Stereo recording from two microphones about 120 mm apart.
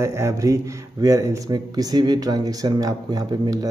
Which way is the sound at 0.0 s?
25° right (ahead or behind).